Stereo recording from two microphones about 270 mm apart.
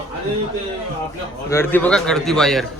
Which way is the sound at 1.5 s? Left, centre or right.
Centre.